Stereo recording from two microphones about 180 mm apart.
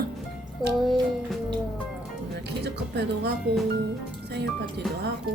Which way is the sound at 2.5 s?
65° right (ahead or behind).